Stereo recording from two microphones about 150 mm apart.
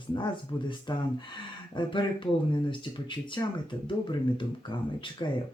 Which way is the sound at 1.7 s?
35° left (ahead or behind).